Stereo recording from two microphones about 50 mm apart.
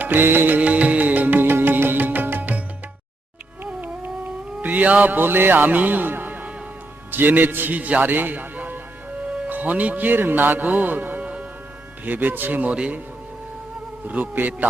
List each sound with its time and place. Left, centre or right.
0.0 s music: right
3.8 s cat: right
7.1 s a man's voice: right
9.2 s music: right
9.5 s a man's voice: right
14.0 s a man's voice: right